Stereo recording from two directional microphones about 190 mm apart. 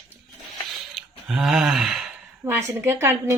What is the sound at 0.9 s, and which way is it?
Speech, centre (ahead or behind).